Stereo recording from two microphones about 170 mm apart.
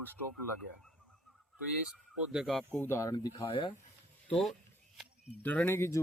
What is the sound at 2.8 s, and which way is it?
Speech, 15° left (ahead or behind).